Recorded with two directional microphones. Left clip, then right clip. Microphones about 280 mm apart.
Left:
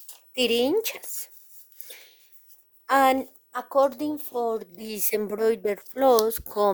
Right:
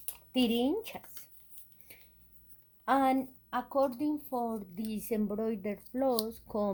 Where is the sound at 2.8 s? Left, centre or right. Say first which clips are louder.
Left 8 dB; left.